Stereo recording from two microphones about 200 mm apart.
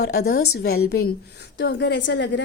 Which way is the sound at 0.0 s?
50° left (ahead or behind).